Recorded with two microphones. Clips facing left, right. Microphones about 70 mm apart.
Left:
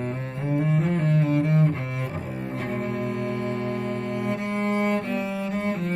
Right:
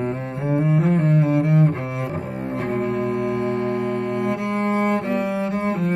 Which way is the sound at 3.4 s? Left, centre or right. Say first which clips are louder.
Right 5 dB; right.